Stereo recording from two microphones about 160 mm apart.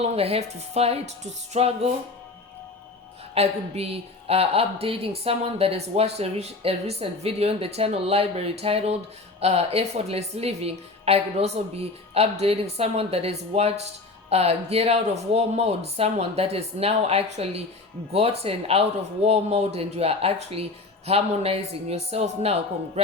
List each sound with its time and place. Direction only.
0.0 s a woman's voice: 40° right (ahead or behind)
3.3 s a woman's voice: 40° right (ahead or behind)